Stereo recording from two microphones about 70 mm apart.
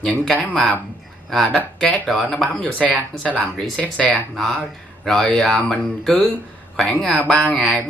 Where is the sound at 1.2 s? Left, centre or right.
Centre.